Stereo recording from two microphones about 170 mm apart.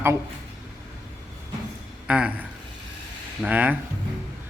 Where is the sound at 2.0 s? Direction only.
5° right (ahead or behind).